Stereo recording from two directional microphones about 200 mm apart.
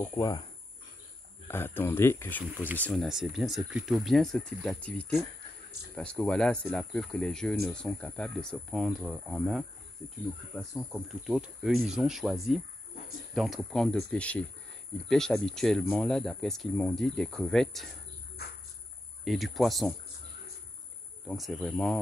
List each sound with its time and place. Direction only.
0.0 s speech: 15° left (ahead or behind)
1.5 s speech: 10° left (ahead or behind)
19.2 s speech: centre (ahead or behind)
21.3 s speech: centre (ahead or behind)